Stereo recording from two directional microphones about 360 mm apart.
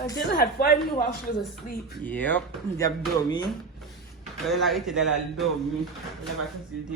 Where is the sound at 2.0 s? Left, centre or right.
Centre.